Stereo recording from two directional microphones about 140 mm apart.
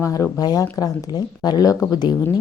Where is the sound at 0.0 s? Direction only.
25° left (ahead or behind).